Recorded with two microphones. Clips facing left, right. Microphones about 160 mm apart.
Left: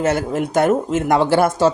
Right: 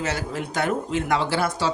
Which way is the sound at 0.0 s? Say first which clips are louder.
Left 9 dB; 50° left (ahead or behind).